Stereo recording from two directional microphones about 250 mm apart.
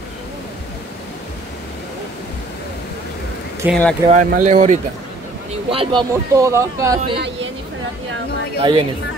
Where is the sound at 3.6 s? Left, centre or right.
Centre.